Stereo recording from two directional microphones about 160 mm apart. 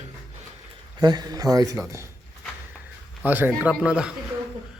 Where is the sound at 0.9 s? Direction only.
25° right (ahead or behind).